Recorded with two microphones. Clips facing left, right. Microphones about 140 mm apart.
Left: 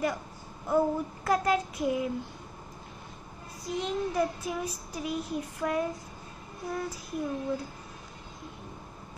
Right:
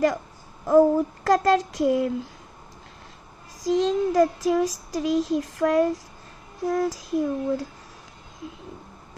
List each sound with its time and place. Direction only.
0.7 s a child's voice: 90° right
3.6 s a child's voice: 90° right